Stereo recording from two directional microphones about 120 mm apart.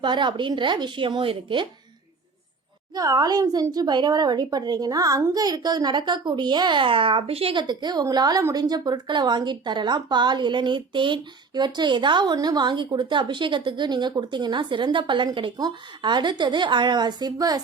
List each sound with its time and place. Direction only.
0.0 s a woman's voice: 40° right (ahead or behind)
2.9 s a woman's voice: 35° right (ahead or behind)